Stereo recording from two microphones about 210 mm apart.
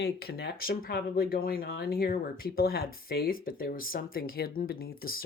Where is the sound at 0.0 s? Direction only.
50° left (ahead or behind).